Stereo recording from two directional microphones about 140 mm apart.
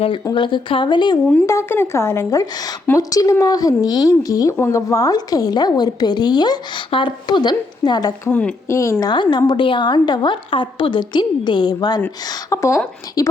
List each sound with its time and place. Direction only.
0.3 s a woman's voice: 35° left (ahead or behind)
1.5 s speech: 20° left (ahead or behind)
8.3 s speech: 10° left (ahead or behind)
8.6 s a woman's voice: 20° left (ahead or behind)